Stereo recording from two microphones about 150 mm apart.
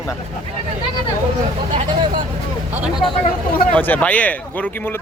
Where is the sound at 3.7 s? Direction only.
10° left (ahead or behind).